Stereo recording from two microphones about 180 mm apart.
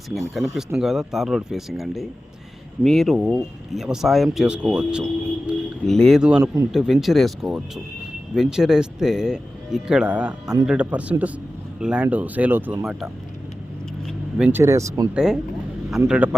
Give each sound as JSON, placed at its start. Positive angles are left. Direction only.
{"t": 0.1, "sound": "speech", "side_deg": 0}
{"t": 10.4, "sound": "speech", "side_deg": -20}
{"t": 10.7, "sound": "speech", "side_deg": -5}
{"t": 14.1, "sound": "vehicle", "side_deg": -5}
{"t": 14.6, "sound": "speech", "side_deg": -15}
{"t": 15.1, "sound": "speech", "side_deg": -5}